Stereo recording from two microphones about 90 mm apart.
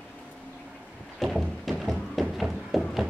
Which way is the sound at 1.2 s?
Centre (ahead or behind).